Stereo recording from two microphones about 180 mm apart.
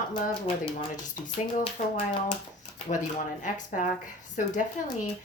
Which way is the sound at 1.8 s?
40° left (ahead or behind).